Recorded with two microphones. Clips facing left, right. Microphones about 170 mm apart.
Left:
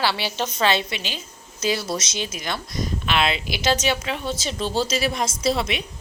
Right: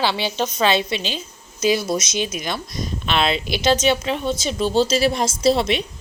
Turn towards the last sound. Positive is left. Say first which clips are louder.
# right 5 dB
turn(degrees=-30)  # may be behind; listen again after turning